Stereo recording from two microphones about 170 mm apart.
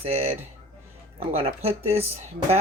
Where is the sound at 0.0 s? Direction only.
35° right (ahead or behind).